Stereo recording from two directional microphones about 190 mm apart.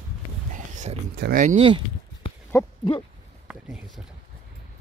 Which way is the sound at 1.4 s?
35° right (ahead or behind).